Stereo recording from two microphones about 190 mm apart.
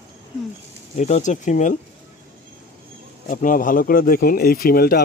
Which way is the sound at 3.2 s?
45° left (ahead or behind).